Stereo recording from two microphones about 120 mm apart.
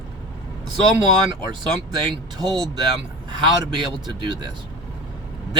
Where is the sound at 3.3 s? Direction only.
40° right (ahead or behind).